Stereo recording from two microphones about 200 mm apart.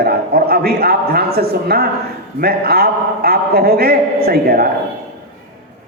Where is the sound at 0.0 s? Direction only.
50° right (ahead or behind).